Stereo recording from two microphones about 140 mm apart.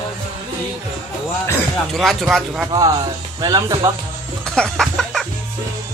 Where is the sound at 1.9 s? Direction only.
Centre (ahead or behind).